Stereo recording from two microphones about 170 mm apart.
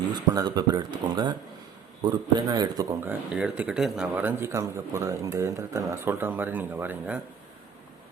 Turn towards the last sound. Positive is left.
turn(degrees=-10)  # may be behind; listen again after turning